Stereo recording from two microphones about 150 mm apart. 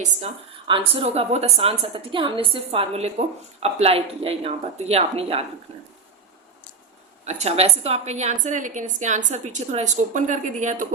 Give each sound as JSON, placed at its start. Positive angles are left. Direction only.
{"t": 0.7, "sound": "a woman's voice", "side_deg": -40}
{"t": 7.3, "sound": "a woman's voice", "side_deg": -45}